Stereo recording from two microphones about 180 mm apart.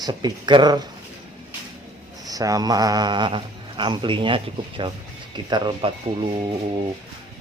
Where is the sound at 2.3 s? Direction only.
20° right (ahead or behind).